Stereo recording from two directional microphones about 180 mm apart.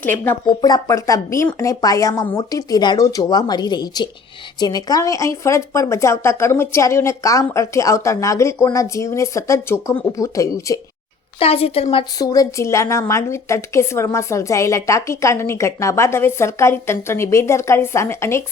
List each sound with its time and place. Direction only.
0.6 s a woman's voice: 20° left (ahead or behind)
11.3 s a woman's voice: 35° left (ahead or behind)
12.2 s a woman's voice: 20° left (ahead or behind)